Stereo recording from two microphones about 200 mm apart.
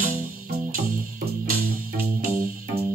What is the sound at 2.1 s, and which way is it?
Music, 45° right (ahead or behind).